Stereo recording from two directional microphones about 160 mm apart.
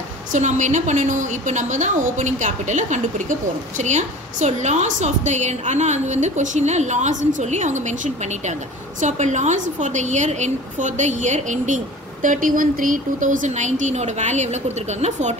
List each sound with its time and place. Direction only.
0.3 s a woman's voice: 50° right (ahead or behind)